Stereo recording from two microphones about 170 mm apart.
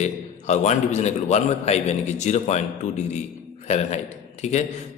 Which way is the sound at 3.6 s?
40° left (ahead or behind).